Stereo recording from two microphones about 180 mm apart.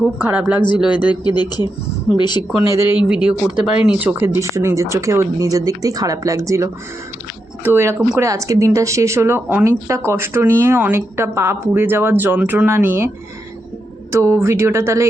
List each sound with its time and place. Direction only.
0.0 s speech: 10° right (ahead or behind)
1.1 s speech: 25° left (ahead or behind)
2.7 s speech: 10° right (ahead or behind)
14.1 s speech: 15° right (ahead or behind)